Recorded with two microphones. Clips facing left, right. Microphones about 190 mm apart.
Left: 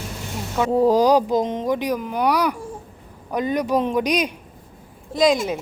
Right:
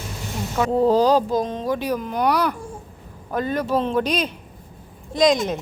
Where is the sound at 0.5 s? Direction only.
10° left (ahead or behind).